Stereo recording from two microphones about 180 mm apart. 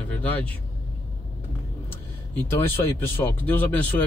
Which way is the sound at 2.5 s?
10° left (ahead or behind).